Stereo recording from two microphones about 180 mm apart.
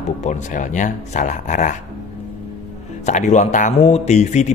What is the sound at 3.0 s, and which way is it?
A man's voice, 40° left (ahead or behind).